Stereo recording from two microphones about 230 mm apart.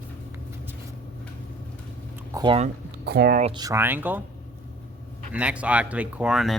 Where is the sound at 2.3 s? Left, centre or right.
Right.